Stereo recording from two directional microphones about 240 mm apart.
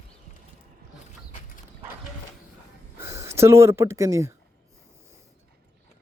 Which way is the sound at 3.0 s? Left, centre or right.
Centre.